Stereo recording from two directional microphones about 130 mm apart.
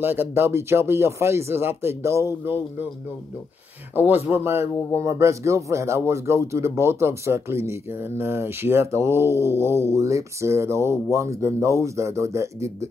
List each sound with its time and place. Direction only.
0.0 s speech: 15° right (ahead or behind)
3.9 s speech: 15° right (ahead or behind)